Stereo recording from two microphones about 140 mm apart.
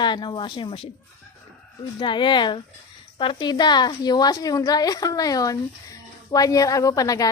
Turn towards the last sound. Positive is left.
turn(degrees=25)  # may be behind; listen again after turning